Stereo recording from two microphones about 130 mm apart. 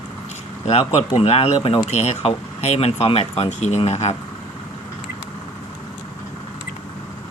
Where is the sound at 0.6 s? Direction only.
55° left (ahead or behind).